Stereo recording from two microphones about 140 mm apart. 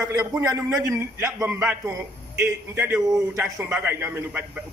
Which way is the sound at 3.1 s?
20° right (ahead or behind).